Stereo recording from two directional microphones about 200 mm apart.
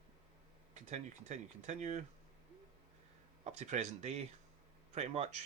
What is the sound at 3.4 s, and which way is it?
Speech, 35° right (ahead or behind).